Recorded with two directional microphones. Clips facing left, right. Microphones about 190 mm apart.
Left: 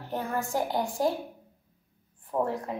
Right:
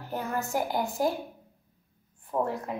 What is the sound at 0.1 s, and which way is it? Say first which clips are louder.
Speech: left 1 dB; 30° left (ahead or behind).